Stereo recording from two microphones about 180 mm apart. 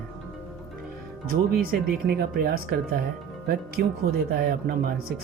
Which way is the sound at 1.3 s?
55° right (ahead or behind).